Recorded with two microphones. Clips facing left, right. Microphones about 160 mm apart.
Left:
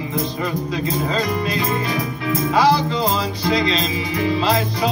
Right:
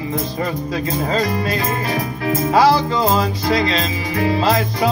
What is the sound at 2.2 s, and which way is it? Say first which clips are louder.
Music: right 3 dB; 45° right (ahead or behind).